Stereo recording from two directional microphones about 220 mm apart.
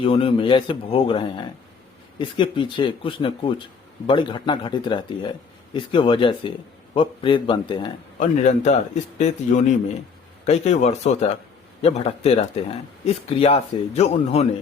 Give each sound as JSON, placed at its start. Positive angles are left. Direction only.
{"t": 0.0, "sound": "speech", "side_deg": 25}
{"t": 8.2, "sound": "speech", "side_deg": 30}